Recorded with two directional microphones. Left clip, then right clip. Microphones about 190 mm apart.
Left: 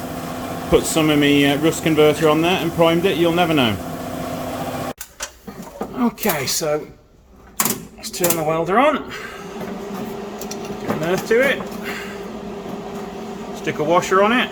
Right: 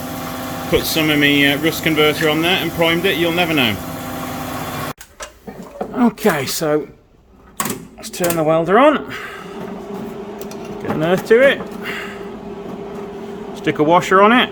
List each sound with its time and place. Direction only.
0.7 s speech: 10° left (ahead or behind)
6.0 s speech: 60° right (ahead or behind)
8.4 s speech: 60° right (ahead or behind)
11.0 s speech: 60° right (ahead or behind)
13.7 s speech: 60° right (ahead or behind)